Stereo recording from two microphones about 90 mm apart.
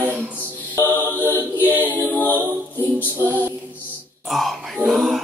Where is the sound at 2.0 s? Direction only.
20° left (ahead or behind).